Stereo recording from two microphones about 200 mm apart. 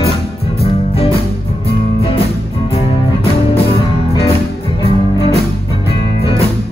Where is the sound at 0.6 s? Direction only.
30° left (ahead or behind).